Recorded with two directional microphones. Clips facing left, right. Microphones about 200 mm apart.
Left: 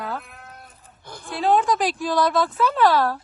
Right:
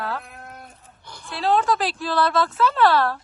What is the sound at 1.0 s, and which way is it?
Speech, 55° left (ahead or behind).